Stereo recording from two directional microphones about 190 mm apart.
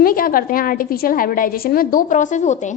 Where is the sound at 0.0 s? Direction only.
50° left (ahead or behind).